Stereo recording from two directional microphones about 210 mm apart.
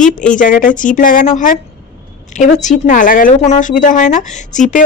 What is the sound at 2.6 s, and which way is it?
A woman's voice, 35° left (ahead or behind).